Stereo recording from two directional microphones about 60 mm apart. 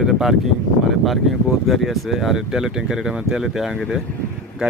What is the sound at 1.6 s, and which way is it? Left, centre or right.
Speech, centre.